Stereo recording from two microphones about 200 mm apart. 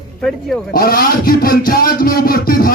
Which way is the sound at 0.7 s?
45° left (ahead or behind).